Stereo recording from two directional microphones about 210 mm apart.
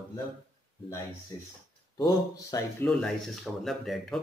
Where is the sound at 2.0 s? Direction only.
15° left (ahead or behind).